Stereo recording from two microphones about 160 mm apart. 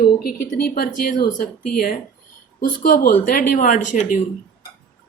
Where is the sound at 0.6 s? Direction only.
65° left (ahead or behind).